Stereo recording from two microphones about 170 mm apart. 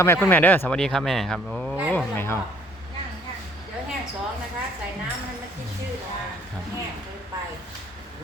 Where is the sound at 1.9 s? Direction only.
10° left (ahead or behind).